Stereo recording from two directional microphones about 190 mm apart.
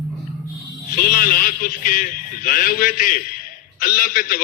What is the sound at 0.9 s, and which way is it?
Speech, 50° left (ahead or behind).